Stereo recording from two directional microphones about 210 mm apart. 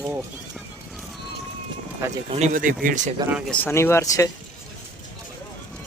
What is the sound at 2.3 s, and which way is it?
Speech, 35° right (ahead or behind).